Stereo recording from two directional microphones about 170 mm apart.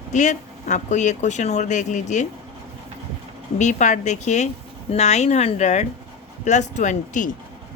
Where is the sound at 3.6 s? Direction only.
45° left (ahead or behind).